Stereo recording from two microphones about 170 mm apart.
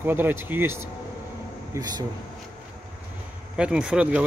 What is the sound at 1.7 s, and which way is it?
Speech, 25° right (ahead or behind).